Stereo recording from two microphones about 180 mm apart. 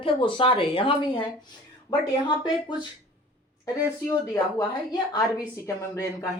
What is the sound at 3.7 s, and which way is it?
A woman's voice, 15° left (ahead or behind).